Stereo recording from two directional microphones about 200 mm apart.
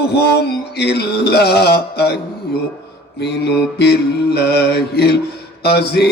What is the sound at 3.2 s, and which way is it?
Mantra, 55° left (ahead or behind).